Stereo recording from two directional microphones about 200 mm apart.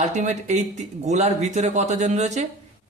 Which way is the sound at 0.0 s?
35° right (ahead or behind).